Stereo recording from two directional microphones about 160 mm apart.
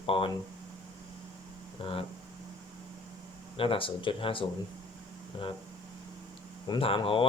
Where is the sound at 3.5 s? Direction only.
35° left (ahead or behind).